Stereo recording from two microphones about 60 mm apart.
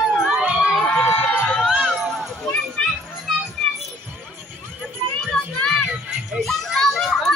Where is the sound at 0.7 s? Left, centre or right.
Centre.